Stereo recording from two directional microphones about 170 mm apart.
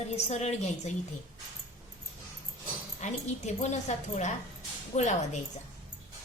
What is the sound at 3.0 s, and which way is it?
A woman's voice, 40° left (ahead or behind).